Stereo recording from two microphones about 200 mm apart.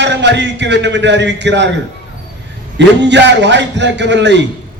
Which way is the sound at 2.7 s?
60° right (ahead or behind).